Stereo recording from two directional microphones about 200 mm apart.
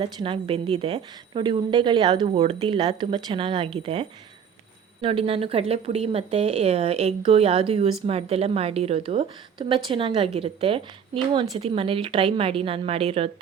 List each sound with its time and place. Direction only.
0.0 s a woman's voice: 25° right (ahead or behind)